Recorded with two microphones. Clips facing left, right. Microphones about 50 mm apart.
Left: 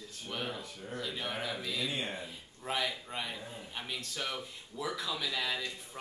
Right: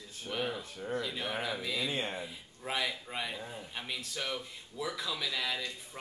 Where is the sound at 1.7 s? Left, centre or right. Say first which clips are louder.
Right 2 dB; right.